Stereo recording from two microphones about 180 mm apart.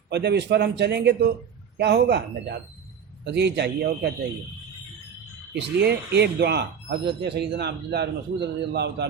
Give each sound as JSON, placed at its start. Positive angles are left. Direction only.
{"t": 0.1, "sound": "speech", "side_deg": -70}
{"t": 3.2, "sound": "speech", "side_deg": -70}
{"t": 5.5, "sound": "speech", "side_deg": -65}